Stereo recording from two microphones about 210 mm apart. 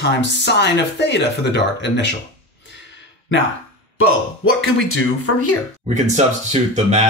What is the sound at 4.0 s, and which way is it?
Speech, 75° left (ahead or behind).